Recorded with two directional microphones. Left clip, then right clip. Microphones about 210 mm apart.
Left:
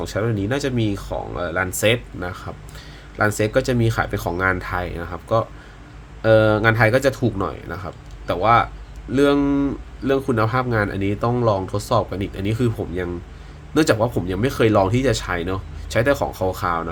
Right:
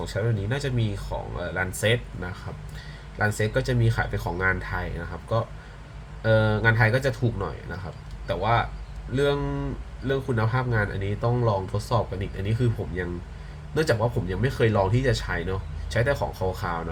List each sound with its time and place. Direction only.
0.0 s speech: 55° left (ahead or behind)